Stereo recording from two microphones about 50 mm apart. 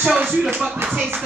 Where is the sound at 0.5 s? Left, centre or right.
Right.